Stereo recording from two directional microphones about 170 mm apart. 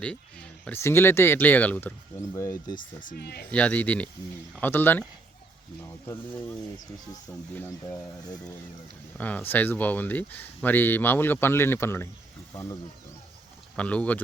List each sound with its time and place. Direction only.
0.0 s speech: 5° left (ahead or behind)
2.7 s speech: 50° left (ahead or behind); by 3.4 s 70° left (ahead or behind)
3.5 s speech: 5° left (ahead or behind)
7.5 s speech: 15° left (ahead or behind)
13.7 s speech: 10° left (ahead or behind)